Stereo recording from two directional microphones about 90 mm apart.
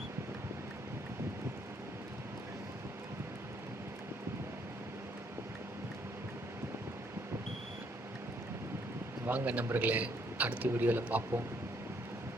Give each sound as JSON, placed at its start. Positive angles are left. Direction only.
{"t": 9.2, "sound": "a man's voice", "side_deg": -20}